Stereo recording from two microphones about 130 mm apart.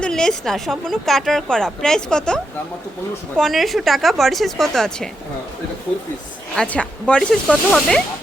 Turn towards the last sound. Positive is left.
turn(degrees=5)  # may be behind; listen again after turning